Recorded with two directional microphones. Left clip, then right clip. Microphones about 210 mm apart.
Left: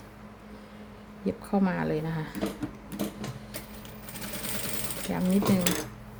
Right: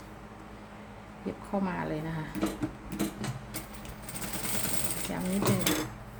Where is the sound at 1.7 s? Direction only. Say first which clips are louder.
Left 4 dB; 50° left (ahead or behind).